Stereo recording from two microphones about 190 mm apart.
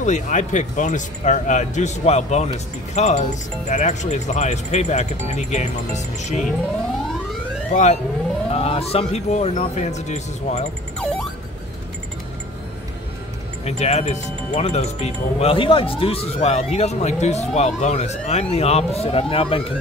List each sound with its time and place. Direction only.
0.0 s speech: 40° left (ahead or behind)
7.7 s speech: 35° left (ahead or behind)
13.7 s speech: 35° left (ahead or behind)